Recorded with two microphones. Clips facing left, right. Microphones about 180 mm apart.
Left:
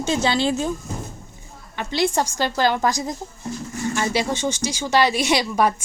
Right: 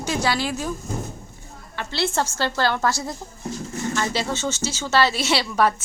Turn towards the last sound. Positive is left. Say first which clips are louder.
# left 1 dB
turn(degrees=15)  # may be behind; listen again after turning